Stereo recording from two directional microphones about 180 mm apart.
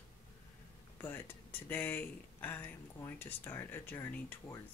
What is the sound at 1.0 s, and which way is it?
Speech, 10° left (ahead or behind).